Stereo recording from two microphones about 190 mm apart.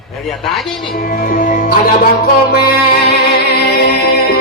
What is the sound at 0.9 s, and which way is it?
Speech, 50° left (ahead or behind).